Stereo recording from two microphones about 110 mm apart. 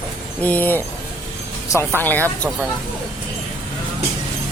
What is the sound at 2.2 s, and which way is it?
Speech, 20° right (ahead or behind).